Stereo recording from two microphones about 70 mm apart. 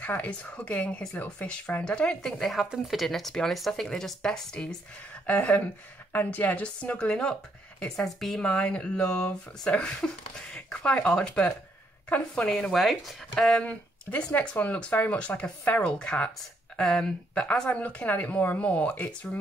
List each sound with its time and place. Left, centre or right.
0.0 s speech: left
5.2 s speech: left; by 13.4 s centre
13.4 s speech: centre